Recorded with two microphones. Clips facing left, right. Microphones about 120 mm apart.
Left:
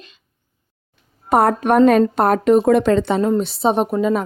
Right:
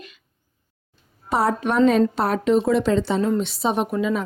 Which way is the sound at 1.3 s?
55° left (ahead or behind).